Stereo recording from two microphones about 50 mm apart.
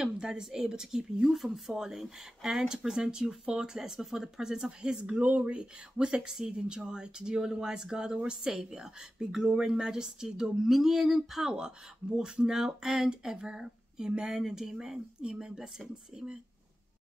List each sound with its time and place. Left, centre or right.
0.0 s a woman's voice: centre